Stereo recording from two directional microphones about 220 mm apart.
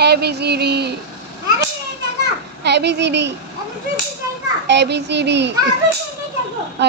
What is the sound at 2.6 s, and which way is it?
Speech, 50° right (ahead or behind).